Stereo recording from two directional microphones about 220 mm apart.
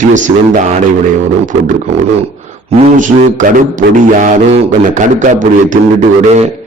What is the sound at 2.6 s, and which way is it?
A man's voice, 35° right (ahead or behind).